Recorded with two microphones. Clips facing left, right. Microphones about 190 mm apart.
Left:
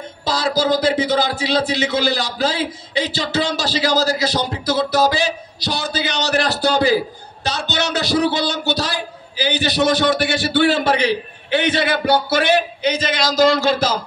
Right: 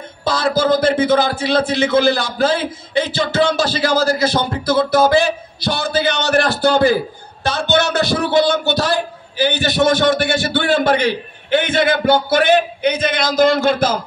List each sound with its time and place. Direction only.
0.2 s a man's voice: 50° right (ahead or behind)